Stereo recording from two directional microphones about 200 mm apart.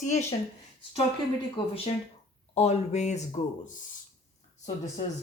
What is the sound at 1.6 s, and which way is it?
Speech, 25° left (ahead or behind).